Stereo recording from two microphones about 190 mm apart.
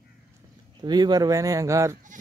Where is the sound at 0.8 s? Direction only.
20° right (ahead or behind).